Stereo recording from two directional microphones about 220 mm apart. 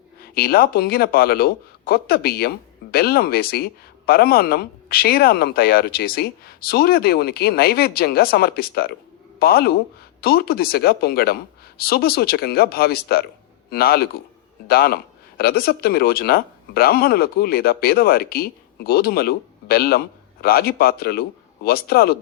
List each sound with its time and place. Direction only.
0.2 s a man's voice: 45° left (ahead or behind)